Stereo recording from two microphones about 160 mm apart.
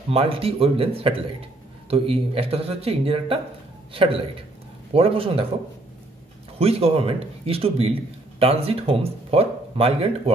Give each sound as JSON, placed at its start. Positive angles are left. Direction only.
{"t": 0.1, "sound": "speech", "side_deg": -35}
{"t": 6.6, "sound": "speech", "side_deg": -35}